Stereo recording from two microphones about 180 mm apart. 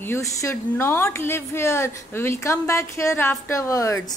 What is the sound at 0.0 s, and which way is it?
A woman's voice, 15° left (ahead or behind).